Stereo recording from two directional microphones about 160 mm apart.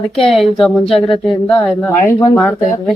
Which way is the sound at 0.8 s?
35° left (ahead or behind).